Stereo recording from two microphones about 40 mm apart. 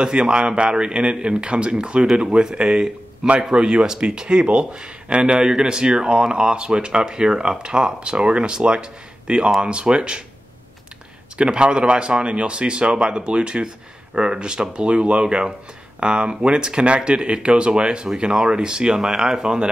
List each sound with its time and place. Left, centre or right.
0.0 s speech: right
11.3 s speech: right